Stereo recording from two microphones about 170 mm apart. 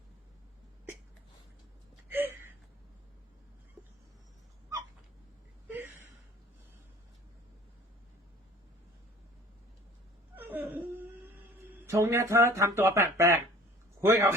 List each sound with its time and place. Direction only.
2.0 s gasp: 10° right (ahead or behind)
5.6 s a sound: 10° right (ahead or behind)
10.3 s whimper: 10° right (ahead or behind)
11.6 s speech: 15° right (ahead or behind)